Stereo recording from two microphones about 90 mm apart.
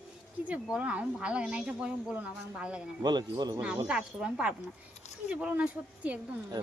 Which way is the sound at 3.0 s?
50° right (ahead or behind).